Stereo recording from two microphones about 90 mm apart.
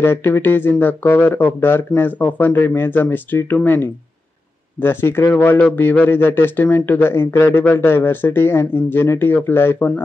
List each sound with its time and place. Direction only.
0.0 s a man's voice: 25° left (ahead or behind)